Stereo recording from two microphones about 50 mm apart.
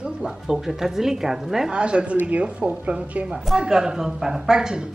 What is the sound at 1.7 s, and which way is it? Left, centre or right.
Speech, right.